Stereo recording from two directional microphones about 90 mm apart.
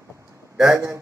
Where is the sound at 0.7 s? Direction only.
35° right (ahead or behind).